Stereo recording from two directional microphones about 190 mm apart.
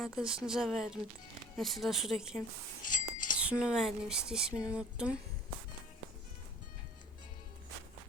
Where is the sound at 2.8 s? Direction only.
45° left (ahead or behind).